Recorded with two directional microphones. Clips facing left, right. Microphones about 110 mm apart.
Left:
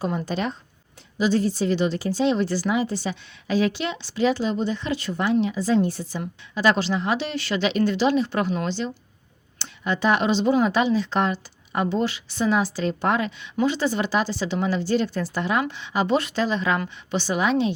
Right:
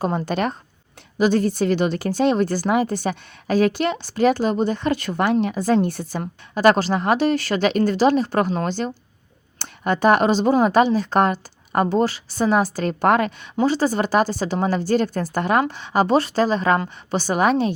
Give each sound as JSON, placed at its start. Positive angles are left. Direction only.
{"t": 0.0, "sound": "a woman's voice", "side_deg": -55}
{"t": 13.6, "sound": "a woman's voice", "side_deg": -40}